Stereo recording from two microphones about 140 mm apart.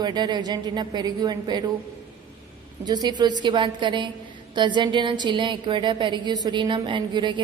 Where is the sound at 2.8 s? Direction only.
30° right (ahead or behind).